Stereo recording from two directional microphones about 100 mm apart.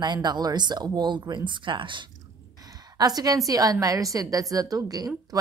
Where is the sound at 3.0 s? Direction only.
40° right (ahead or behind).